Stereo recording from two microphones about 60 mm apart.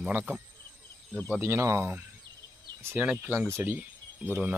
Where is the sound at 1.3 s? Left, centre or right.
Right.